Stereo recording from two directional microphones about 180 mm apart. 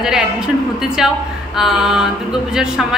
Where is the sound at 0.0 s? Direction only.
5° right (ahead or behind).